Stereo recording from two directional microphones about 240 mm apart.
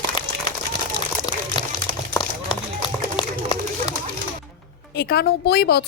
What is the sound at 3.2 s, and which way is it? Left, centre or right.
Run, centre.